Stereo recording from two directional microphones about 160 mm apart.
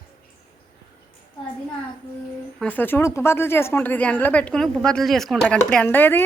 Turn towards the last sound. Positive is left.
turn(degrees=10)  # may be behind; listen again after turning